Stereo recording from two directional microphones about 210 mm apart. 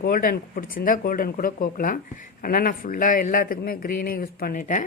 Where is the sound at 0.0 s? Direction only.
45° left (ahead or behind).